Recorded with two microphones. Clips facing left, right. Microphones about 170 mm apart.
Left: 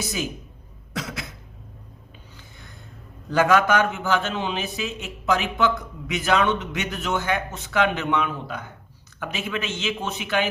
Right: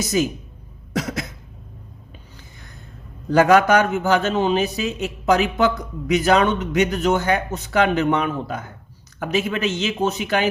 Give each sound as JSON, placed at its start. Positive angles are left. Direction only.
{"t": 0.0, "sound": "a man's voice", "side_deg": -40}
{"t": 0.9, "sound": "cough", "side_deg": -40}
{"t": 3.3, "sound": "a man's voice", "side_deg": -40}